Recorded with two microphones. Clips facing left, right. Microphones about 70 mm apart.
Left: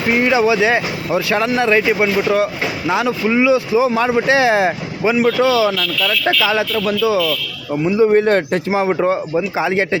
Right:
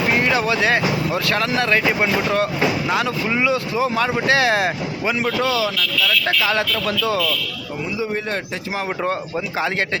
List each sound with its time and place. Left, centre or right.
0.2 s speech: centre
2.8 s speech: centre
3.2 s speech: centre
4.3 s speech: left
6.4 s speech: centre
7.9 s a man's voice: left
8.9 s speech: centre